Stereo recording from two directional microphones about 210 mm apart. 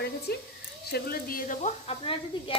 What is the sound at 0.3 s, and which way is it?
Speech, 50° left (ahead or behind).